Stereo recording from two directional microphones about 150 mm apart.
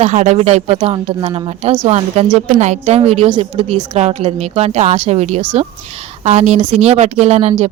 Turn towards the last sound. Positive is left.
turn(degrees=-45)  # may be behind; listen again after turning